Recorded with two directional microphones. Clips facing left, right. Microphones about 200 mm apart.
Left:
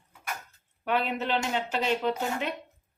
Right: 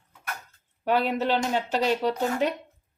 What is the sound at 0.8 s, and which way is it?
Speech, 35° right (ahead or behind).